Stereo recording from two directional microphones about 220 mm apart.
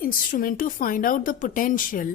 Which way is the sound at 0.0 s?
40° left (ahead or behind).